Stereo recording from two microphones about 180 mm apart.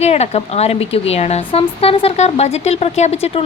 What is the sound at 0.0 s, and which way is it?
A woman's voice, 35° left (ahead or behind).